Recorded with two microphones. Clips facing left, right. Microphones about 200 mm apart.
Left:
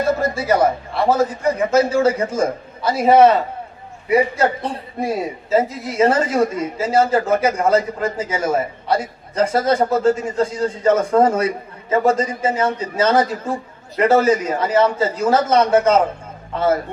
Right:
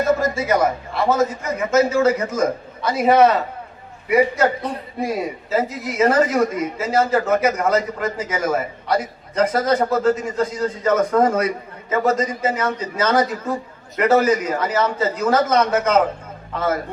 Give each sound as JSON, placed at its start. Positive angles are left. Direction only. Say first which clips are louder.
{"t": 0.0, "sound": "a man's voice", "louder": "even", "side_deg": 30}